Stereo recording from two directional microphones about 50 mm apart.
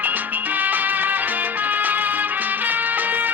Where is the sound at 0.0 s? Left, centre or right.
Right.